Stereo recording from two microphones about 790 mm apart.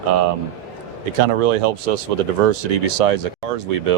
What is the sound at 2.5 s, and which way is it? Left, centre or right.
Speech, right.